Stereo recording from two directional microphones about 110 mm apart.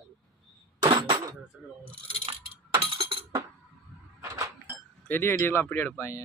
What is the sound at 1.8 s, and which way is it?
Chink, 55° right (ahead or behind).